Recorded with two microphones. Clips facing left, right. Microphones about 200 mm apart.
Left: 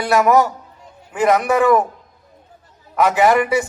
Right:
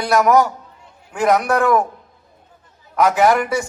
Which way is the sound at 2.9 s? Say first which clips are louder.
Even; centre (ahead or behind).